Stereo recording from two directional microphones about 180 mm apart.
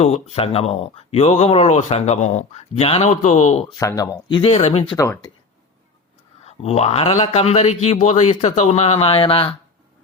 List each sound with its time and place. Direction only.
0.0 s speech: 35° left (ahead or behind)
3.8 s speech: 20° left (ahead or behind); by 4.9 s 35° left (ahead or behind)
4.9 s speech: 15° left (ahead or behind)
6.4 s speech: 35° left (ahead or behind)